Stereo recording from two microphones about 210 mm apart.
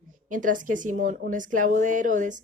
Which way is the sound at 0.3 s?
40° right (ahead or behind).